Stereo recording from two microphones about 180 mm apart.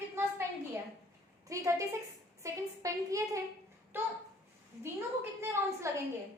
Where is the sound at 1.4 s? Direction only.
15° right (ahead or behind).